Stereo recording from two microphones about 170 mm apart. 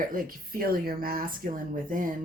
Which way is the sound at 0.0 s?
55° right (ahead or behind).